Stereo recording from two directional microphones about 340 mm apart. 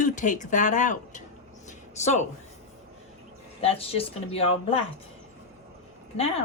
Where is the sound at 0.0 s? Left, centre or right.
Left.